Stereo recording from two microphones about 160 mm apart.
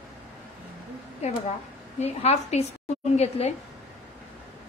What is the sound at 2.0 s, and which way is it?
A woman's voice, 40° left (ahead or behind).